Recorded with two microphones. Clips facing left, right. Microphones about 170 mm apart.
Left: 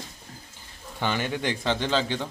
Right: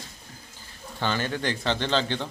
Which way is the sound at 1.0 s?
15° left (ahead or behind).